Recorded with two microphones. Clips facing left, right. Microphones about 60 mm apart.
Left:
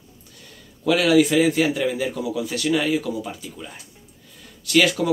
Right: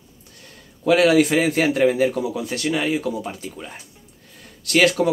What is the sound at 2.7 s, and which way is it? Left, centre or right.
Speech, right.